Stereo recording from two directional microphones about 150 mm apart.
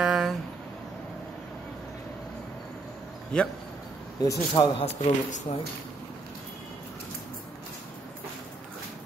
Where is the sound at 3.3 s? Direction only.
5° left (ahead or behind).